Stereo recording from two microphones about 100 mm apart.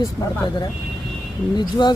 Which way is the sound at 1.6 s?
45° left (ahead or behind).